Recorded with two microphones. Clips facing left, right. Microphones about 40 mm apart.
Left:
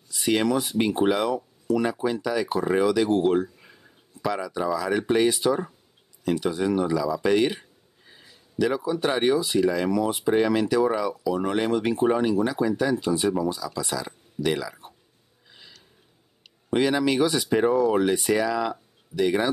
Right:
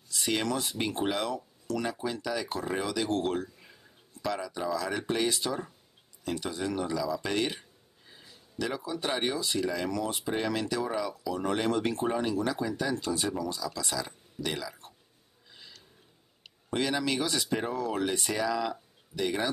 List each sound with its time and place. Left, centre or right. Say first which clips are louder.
0.1 s speech: left 7 dB; centre
14.0 s speech: left 9 dB; centre
16.7 s speech: left 7 dB; centre